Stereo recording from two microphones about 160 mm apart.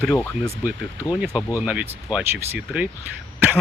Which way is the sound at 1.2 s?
5° right (ahead or behind).